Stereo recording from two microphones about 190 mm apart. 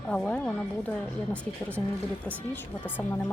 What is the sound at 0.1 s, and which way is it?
A woman's voice, 5° left (ahead or behind).